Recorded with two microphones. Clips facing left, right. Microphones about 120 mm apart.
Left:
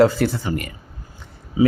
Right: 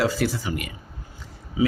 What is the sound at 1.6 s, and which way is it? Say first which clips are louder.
Speech: left 6 dB; 30° left (ahead or behind).